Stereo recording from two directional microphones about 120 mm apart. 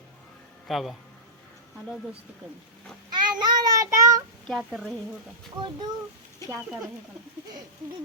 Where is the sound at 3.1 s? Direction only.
35° right (ahead or behind).